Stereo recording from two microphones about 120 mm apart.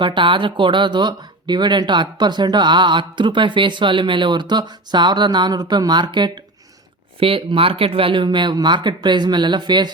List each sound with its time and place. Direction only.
0.0 s speech: 40° right (ahead or behind)
7.2 s speech: 50° right (ahead or behind)